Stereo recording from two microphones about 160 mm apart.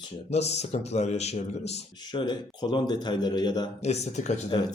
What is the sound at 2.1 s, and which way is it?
Speech, 30° left (ahead or behind).